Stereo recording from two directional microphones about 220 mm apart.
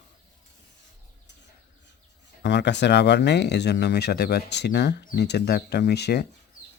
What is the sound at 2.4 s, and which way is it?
Speech, 50° left (ahead or behind).